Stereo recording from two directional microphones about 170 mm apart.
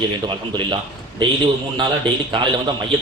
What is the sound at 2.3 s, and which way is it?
Speech, 30° right (ahead or behind).